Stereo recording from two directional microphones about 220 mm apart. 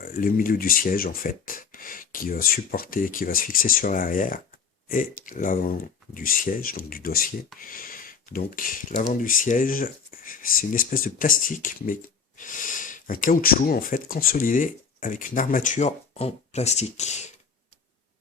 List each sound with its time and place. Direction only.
0.0 s speech: 40° left (ahead or behind)